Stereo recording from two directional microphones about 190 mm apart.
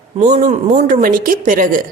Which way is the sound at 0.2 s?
40° right (ahead or behind).